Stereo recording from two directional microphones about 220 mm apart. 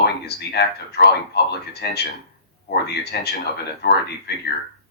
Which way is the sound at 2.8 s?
50° left (ahead or behind).